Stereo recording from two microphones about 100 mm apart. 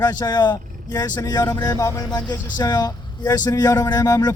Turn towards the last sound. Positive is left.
turn(degrees=40)  # may be behind; listen again after turning